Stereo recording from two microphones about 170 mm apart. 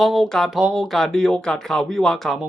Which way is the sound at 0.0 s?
Centre (ahead or behind).